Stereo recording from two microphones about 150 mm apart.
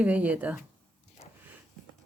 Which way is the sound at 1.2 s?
45° left (ahead or behind).